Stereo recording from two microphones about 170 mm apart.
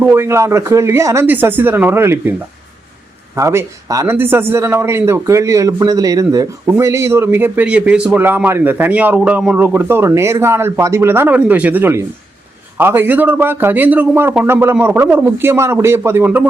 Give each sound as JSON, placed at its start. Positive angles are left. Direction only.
{"t": 0.0, "sound": "a man's voice", "side_deg": -15}
{"t": 3.3, "sound": "a man's voice", "side_deg": -15}